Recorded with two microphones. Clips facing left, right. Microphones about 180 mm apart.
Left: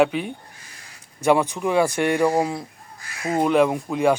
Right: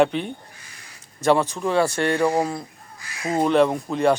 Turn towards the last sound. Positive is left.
turn(degrees=10)  # may be behind; listen again after turning